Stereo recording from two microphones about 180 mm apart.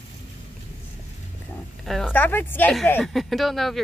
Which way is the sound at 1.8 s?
Centre (ahead or behind).